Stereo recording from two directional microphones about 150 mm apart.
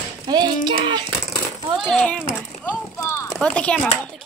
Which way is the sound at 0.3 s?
30° right (ahead or behind).